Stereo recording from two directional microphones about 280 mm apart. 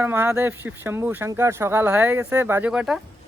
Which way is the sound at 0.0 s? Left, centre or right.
Centre.